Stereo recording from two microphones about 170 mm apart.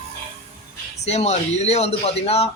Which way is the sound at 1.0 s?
40° left (ahead or behind).